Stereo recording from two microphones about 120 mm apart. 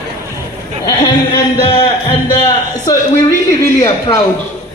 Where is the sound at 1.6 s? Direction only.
45° left (ahead or behind).